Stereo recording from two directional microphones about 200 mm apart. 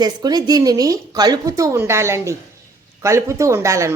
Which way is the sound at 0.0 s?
20° right (ahead or behind).